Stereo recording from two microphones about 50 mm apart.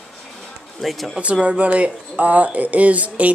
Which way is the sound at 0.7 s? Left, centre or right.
Centre.